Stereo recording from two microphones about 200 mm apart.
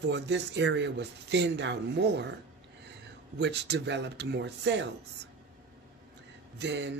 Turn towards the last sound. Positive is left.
turn(degrees=-60)  # may be behind; listen again after turning